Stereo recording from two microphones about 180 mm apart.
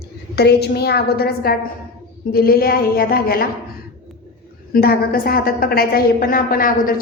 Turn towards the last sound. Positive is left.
turn(degrees=50)  # may be behind; listen again after turning